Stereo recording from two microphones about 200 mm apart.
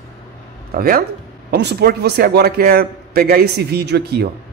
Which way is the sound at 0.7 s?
50° right (ahead or behind).